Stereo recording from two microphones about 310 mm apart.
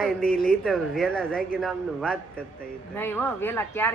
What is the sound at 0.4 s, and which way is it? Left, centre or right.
Speech, centre.